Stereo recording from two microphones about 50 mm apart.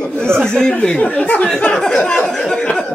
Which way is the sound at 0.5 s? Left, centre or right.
Centre.